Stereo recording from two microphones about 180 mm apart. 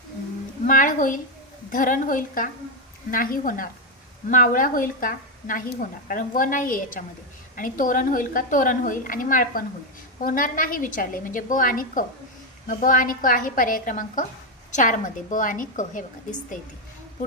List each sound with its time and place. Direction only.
0.6 s speech: 50° left (ahead or behind)